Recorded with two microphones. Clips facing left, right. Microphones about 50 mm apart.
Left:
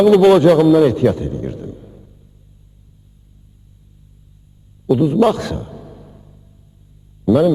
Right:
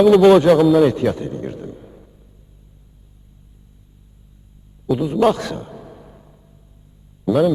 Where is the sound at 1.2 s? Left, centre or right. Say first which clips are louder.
Left 2 dB; right.